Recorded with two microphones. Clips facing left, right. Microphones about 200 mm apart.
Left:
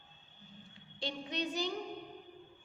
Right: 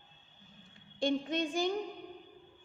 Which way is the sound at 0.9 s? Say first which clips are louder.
Right 8 dB; 50° right (ahead or behind).